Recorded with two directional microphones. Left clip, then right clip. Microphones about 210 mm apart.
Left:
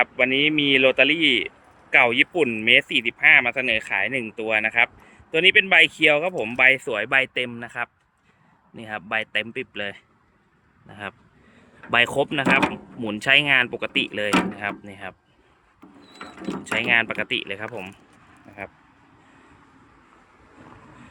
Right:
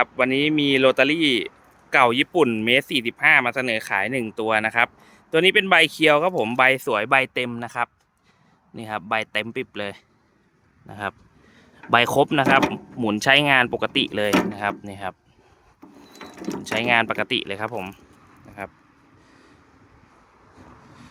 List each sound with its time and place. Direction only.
0.0 s speech: 25° right (ahead or behind)
16.7 s speech: 20° right (ahead or behind)